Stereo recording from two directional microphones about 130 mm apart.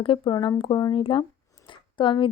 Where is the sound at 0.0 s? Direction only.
40° left (ahead or behind).